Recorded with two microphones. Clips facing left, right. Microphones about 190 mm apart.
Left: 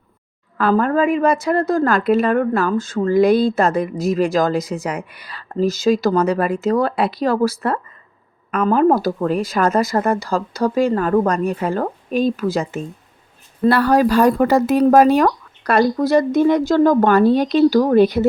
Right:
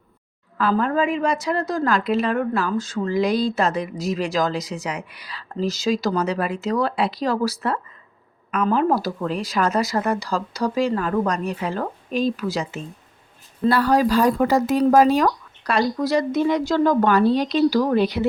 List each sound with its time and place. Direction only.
0.6 s a woman's voice: 50° left (ahead or behind)